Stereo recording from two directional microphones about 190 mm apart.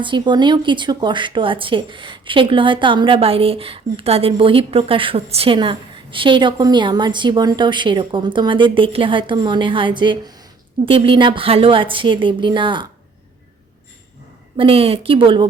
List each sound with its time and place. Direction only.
0.0 s speech: 25° right (ahead or behind)
14.5 s speech: 30° right (ahead or behind)